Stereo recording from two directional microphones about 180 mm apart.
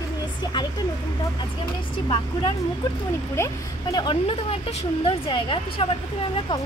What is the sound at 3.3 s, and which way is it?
A woman's voice, 20° left (ahead or behind).